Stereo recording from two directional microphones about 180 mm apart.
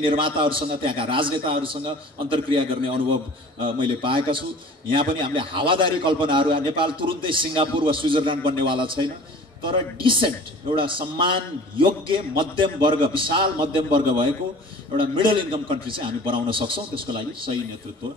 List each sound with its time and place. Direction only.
0.0 s a man's voice: 30° right (ahead or behind)